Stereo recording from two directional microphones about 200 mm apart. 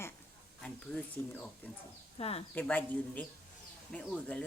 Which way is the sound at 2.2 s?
30° left (ahead or behind).